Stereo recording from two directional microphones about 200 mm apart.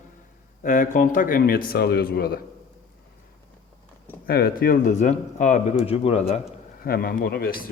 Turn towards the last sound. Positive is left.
turn(degrees=50)  # may be behind; listen again after turning